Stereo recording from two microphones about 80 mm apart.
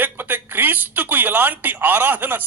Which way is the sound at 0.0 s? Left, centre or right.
Right.